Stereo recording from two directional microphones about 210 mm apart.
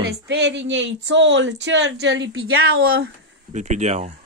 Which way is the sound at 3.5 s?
35° right (ahead or behind).